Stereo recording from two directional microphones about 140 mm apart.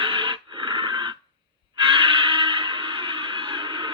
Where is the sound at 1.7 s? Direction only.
35° right (ahead or behind).